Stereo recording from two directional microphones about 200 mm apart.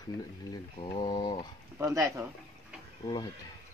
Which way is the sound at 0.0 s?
20° left (ahead or behind).